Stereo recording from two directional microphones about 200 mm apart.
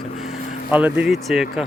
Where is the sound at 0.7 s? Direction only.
5° right (ahead or behind).